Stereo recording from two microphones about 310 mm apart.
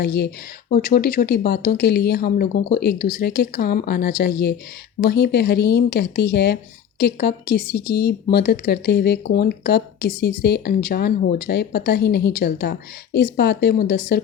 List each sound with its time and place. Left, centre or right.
0.0 s speech: left